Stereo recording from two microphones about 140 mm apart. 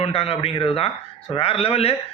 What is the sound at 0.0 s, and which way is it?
A man's voice, 45° left (ahead or behind).